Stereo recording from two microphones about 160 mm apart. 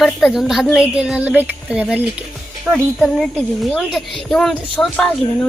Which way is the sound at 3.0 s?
5° left (ahead or behind).